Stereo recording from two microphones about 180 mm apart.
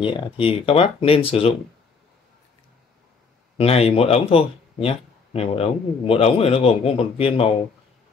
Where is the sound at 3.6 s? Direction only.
35° left (ahead or behind).